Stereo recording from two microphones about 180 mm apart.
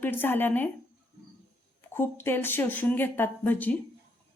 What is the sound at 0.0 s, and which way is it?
Speech, 10° left (ahead or behind).